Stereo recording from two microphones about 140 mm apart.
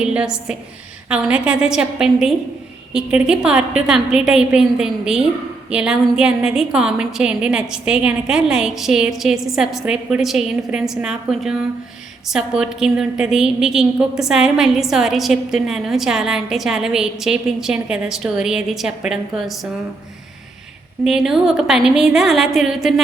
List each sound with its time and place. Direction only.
0.0 s a woman's voice: 5° right (ahead or behind)
21.1 s a woman's voice: 5° right (ahead or behind)